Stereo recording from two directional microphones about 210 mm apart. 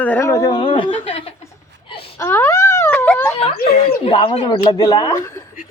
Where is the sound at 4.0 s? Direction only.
25° left (ahead or behind).